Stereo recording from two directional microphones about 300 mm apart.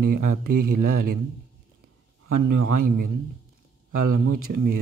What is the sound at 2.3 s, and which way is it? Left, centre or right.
Speech, right.